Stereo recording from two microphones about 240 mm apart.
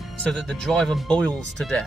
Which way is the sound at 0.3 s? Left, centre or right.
Centre.